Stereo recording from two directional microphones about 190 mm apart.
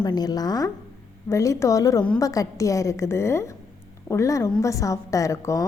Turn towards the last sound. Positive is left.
turn(degrees=15)  # may be behind; listen again after turning